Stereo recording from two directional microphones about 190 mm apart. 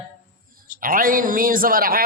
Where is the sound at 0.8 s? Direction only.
45° right (ahead or behind).